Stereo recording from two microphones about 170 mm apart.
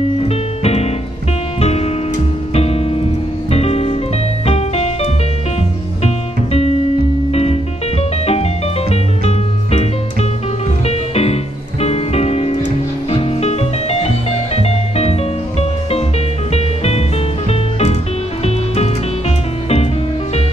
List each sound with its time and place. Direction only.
0.2 s music: 40° left (ahead or behind)
8.9 s music: 40° left (ahead or behind)
10.9 s music: 40° left (ahead or behind)
16.5 s music: 40° left (ahead or behind)